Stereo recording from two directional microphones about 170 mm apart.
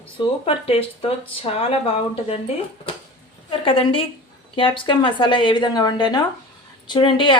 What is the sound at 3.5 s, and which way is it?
A woman's voice, 30° left (ahead or behind).